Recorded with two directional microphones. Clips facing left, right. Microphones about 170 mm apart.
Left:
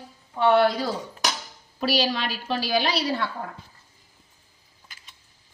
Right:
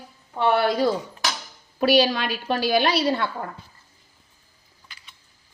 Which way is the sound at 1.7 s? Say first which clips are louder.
Right 6 dB; 55° right (ahead or behind).